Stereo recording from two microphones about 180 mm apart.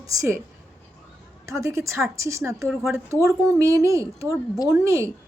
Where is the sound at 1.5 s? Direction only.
15° right (ahead or behind).